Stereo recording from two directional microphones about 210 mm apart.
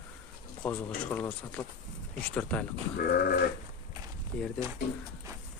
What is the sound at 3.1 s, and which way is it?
Sheep, 45° left (ahead or behind).